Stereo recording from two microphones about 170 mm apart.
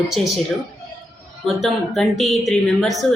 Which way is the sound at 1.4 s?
Centre (ahead or behind).